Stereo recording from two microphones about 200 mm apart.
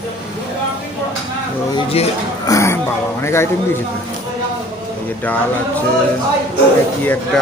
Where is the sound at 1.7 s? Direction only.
30° left (ahead or behind).